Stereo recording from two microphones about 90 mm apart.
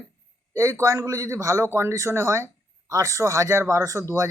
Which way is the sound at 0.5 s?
35° right (ahead or behind).